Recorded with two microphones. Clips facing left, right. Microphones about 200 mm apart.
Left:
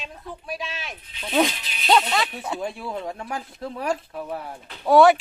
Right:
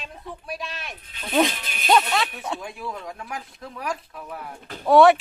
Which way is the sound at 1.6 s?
50° right (ahead or behind).